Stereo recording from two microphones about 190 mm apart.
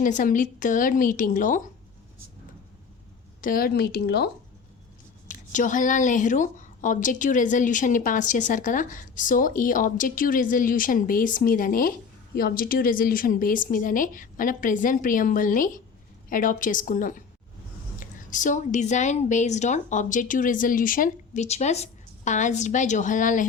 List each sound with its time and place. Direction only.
0.0 s a woman's voice: 45° left (ahead or behind)
3.4 s a woman's voice: 50° left (ahead or behind)
5.3 s a woman's voice: 40° left (ahead or behind)